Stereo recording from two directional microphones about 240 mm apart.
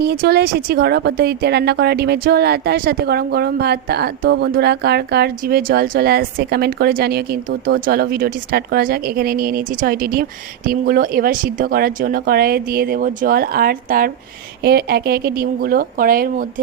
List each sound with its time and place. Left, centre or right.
0.0 s a woman's voice: right